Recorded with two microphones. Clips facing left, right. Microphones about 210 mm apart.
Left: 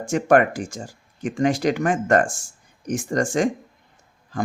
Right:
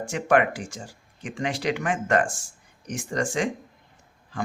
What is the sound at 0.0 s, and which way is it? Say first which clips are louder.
Speech: left 4 dB; 45° left (ahead or behind).